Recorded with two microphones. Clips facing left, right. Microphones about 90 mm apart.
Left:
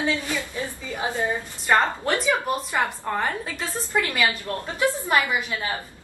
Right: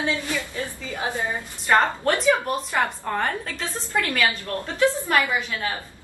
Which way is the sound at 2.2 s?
5° left (ahead or behind).